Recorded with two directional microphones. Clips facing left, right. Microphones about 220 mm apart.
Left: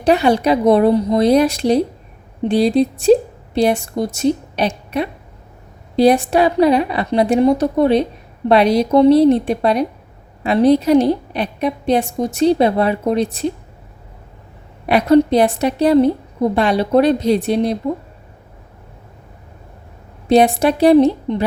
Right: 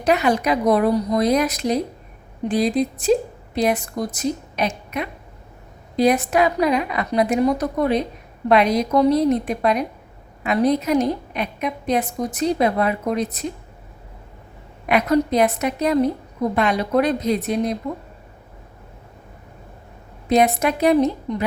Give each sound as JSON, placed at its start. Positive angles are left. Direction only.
{"t": 0.0, "sound": "a woman's voice", "side_deg": 30}
{"t": 14.8, "sound": "a woman's voice", "side_deg": 30}
{"t": 20.2, "sound": "a woman's voice", "side_deg": 30}